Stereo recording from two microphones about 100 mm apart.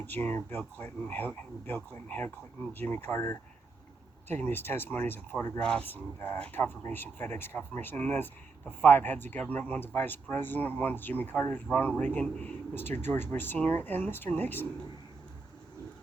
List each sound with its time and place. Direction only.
0.0 s speech: 20° left (ahead or behind)
5.5 s speech: 10° left (ahead or behind)